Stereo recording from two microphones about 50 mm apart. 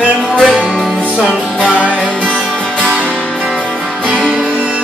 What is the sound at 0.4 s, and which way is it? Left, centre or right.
Music, centre.